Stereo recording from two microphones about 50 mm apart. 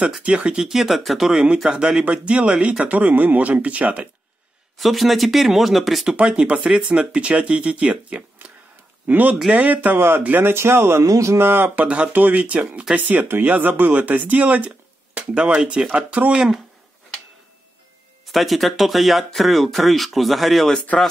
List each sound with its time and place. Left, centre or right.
0.2 s speech: right; by 1.4 s centre
1.8 s speech: centre
4.7 s speech: centre
6.1 s speech: right
9.0 s speech: right
9.9 s speech: right
11.3 s speech: right
11.8 s speech: right
15.3 s speech: right
18.2 s speech: centre